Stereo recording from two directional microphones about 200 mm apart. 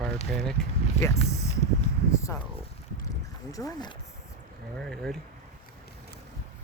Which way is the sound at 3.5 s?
20° left (ahead or behind).